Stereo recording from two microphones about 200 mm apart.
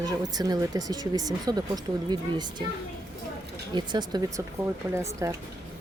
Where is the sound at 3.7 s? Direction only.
20° right (ahead or behind).